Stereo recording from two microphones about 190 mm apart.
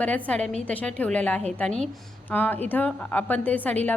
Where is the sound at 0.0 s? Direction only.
5° left (ahead or behind).